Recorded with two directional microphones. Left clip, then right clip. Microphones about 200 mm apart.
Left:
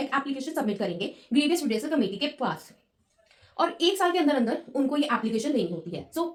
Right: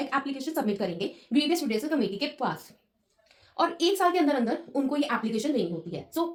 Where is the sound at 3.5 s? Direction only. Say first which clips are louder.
Left 1 dB; 40° right (ahead or behind).